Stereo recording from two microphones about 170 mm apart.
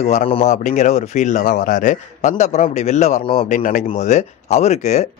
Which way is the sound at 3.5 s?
50° left (ahead or behind).